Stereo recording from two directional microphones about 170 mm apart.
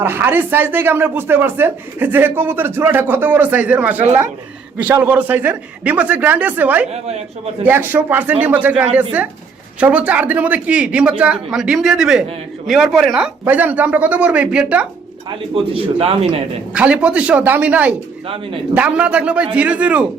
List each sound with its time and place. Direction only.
0.0 s speech: 10° right (ahead or behind)
15.5 s speech: 35° right (ahead or behind)
16.7 s speech: 5° right (ahead or behind)